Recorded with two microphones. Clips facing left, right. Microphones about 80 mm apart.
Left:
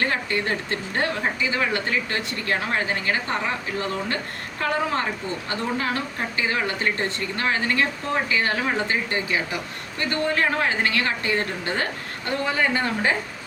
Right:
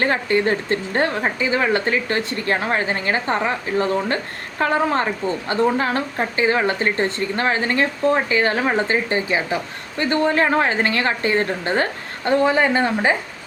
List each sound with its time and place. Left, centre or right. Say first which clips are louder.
0.0 s speech: right 6 dB; right